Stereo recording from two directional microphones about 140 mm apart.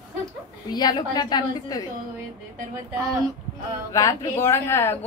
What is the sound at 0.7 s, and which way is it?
A woman's voice, 30° left (ahead or behind).